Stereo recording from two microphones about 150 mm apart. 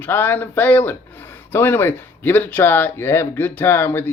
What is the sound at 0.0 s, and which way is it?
Speech, 15° left (ahead or behind).